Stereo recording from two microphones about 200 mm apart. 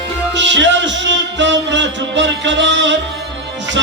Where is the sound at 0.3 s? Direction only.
65° right (ahead or behind).